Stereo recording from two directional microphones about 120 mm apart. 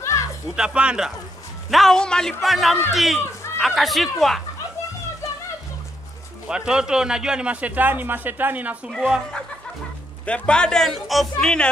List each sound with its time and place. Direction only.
0.0 s music: 25° left (ahead or behind)
0.6 s a man's voice: 5° right (ahead or behind)
6.4 s a man's voice: 5° right (ahead or behind)
10.2 s a man's voice: 10° left (ahead or behind)